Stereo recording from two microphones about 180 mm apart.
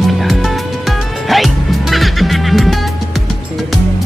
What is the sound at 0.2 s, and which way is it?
Music, centre (ahead or behind).